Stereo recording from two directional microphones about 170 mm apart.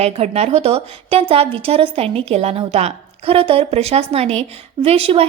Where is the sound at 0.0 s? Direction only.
40° right (ahead or behind).